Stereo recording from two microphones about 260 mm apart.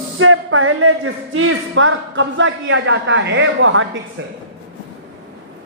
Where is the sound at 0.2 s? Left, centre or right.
Right.